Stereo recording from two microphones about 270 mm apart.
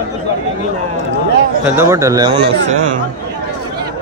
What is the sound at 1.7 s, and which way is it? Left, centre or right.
Speech, centre.